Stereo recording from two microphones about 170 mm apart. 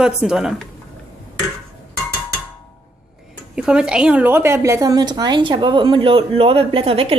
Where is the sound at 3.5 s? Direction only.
5° right (ahead or behind).